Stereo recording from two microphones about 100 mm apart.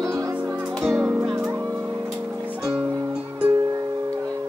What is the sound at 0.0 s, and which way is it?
Music, 35° right (ahead or behind).